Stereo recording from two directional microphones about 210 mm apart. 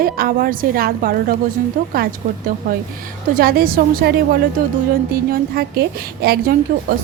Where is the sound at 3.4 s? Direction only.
45° right (ahead or behind).